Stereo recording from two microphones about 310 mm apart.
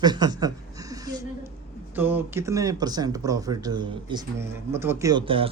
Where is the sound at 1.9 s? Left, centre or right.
Centre.